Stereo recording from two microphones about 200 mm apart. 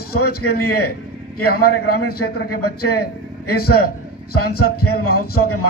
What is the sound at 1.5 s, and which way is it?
A man's voice, 50° left (ahead or behind).